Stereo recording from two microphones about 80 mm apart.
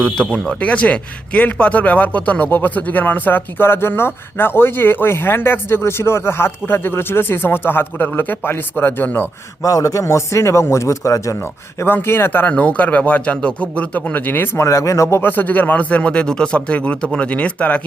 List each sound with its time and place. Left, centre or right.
0.0 s a man's voice: centre
9.6 s a man's voice: left
11.3 s a man's voice: left
15.2 s speech: left